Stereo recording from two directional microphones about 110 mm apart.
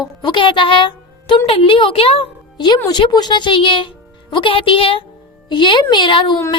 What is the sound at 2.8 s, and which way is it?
Speech, 40° left (ahead or behind).